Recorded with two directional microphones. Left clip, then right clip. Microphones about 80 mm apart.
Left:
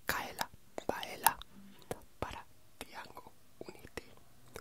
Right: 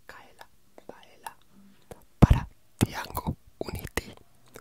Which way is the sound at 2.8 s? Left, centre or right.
Right.